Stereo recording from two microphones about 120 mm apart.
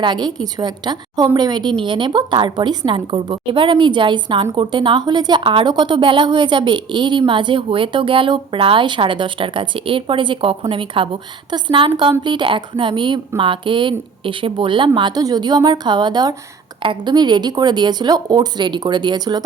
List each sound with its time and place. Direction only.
0.0 s a woman's voice: 40° right (ahead or behind)